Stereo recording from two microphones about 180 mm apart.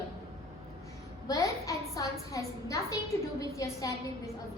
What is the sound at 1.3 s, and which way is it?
A woman's voice, 20° left (ahead or behind).